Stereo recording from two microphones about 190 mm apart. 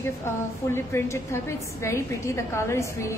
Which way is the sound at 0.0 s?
15° left (ahead or behind).